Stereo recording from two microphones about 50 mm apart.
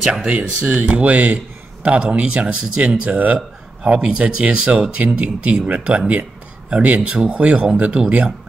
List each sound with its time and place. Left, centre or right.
0.0 s speech: centre
0.3 s a man's voice: right